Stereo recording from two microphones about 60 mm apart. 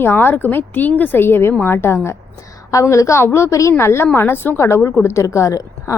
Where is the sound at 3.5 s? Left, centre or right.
Left.